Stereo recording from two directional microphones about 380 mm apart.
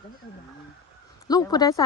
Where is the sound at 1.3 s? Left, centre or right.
Centre.